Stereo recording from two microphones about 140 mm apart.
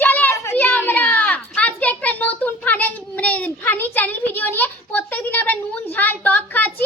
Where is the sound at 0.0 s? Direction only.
15° left (ahead or behind).